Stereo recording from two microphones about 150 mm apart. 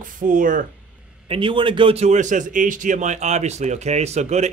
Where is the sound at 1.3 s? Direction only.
35° right (ahead or behind).